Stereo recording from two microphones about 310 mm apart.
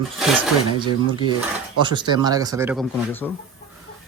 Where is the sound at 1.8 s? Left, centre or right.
Centre.